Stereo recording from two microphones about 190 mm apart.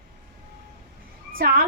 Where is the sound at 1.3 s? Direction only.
50° right (ahead or behind).